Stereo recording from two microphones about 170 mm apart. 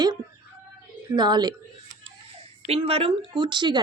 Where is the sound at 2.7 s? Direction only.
35° right (ahead or behind).